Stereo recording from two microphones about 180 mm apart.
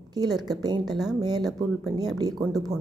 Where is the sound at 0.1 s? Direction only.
20° right (ahead or behind).